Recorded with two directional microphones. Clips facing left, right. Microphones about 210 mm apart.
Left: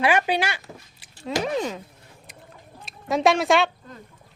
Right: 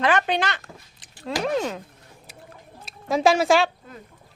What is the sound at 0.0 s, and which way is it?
A woman's voice, 10° left (ahead or behind).